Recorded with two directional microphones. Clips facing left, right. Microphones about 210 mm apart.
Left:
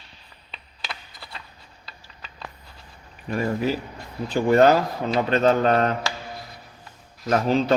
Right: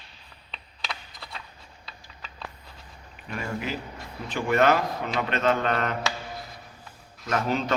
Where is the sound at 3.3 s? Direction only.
40° left (ahead or behind).